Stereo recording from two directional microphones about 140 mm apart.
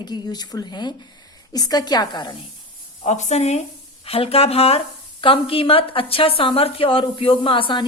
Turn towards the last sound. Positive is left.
turn(degrees=35)  # may be behind; listen again after turning